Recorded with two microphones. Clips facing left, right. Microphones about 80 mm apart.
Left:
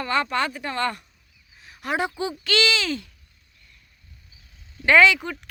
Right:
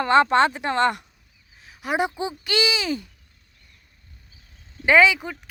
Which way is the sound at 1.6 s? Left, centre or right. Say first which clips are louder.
Left 1 dB; centre.